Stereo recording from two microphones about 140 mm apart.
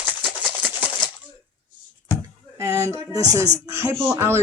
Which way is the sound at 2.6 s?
20° right (ahead or behind).